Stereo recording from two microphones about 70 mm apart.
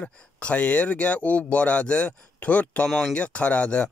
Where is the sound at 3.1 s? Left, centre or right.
Centre.